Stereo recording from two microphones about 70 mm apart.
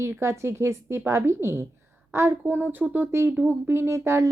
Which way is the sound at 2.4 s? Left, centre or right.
Right.